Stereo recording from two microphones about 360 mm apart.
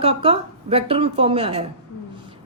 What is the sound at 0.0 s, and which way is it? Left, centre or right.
Speech, centre.